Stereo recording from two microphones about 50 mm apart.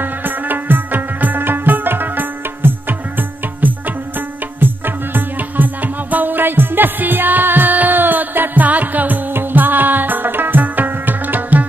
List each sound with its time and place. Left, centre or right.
0.0 s music: right